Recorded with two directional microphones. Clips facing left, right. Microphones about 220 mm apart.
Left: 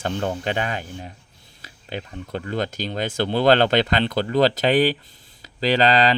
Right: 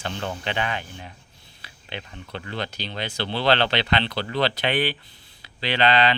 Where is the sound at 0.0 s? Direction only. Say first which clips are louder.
Left 5 dB; 45° left (ahead or behind).